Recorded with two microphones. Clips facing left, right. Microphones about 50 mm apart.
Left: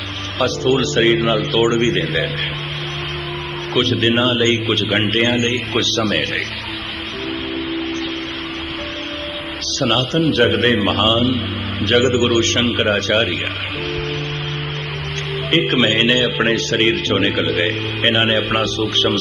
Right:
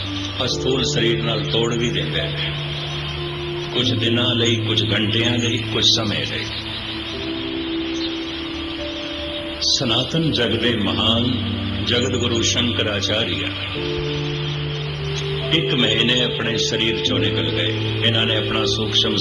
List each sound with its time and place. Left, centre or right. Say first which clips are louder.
0.3 s a man's voice: left 5 dB; left
3.8 s a man's voice: left 5 dB; left
9.6 s a man's voice: left 4 dB; left
15.4 s a man's voice: left 4 dB; left